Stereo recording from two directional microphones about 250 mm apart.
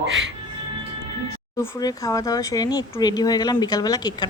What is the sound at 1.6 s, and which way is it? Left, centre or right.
Speech, centre.